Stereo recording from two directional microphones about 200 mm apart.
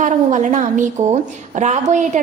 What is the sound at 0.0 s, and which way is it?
A woman's voice, 40° right (ahead or behind).